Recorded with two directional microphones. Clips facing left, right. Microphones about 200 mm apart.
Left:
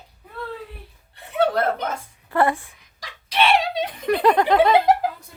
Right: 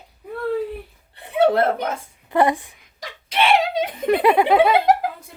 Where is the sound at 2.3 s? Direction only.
15° right (ahead or behind).